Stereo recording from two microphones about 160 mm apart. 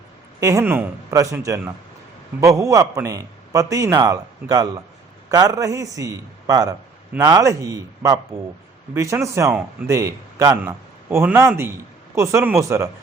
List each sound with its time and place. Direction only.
0.3 s a man's voice: 20° right (ahead or behind)